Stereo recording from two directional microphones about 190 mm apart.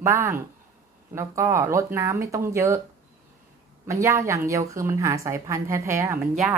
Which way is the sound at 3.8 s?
15° right (ahead or behind).